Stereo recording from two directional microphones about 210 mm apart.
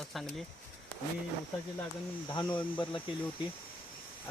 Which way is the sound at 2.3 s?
20° left (ahead or behind).